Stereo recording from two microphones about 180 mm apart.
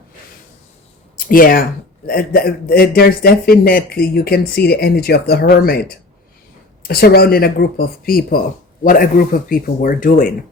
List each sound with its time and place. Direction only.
1.1 s a man's voice: 50° left (ahead or behind)
6.8 s a man's voice: 60° left (ahead or behind)